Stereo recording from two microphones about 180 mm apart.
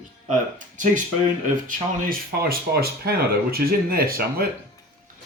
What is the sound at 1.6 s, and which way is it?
Speech, 55° right (ahead or behind).